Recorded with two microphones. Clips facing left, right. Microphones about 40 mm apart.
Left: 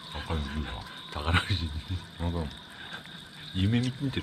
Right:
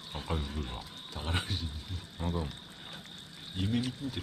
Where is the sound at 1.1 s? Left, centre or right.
Left.